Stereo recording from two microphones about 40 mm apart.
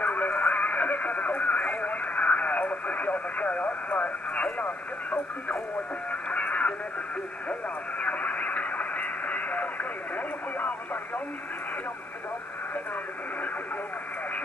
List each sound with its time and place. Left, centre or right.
0.0 s radio: left
4.6 s radio: left
6.3 s radio: left
8.0 s radio: left